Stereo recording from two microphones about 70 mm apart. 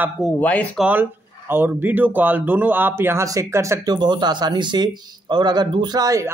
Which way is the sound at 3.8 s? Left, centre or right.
Right.